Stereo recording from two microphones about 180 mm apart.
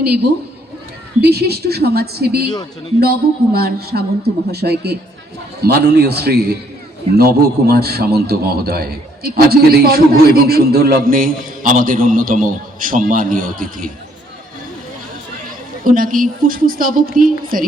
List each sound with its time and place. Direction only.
1.2 s a man's voice: 65° right (ahead or behind)
7.7 s a man's voice: 60° right (ahead or behind)
15.8 s a woman's voice: 50° right (ahead or behind)